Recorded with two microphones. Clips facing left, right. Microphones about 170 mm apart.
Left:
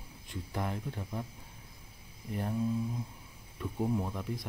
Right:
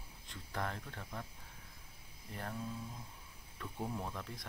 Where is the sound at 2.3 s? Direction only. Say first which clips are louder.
Left 9 dB; 15° left (ahead or behind).